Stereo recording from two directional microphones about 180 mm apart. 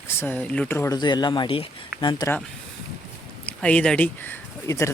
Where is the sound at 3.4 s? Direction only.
10° left (ahead or behind).